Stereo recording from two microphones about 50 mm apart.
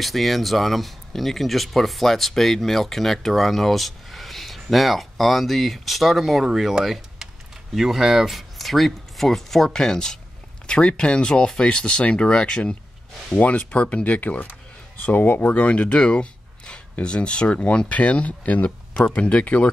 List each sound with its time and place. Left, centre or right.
0.0 s speech: centre
13.3 s speech: left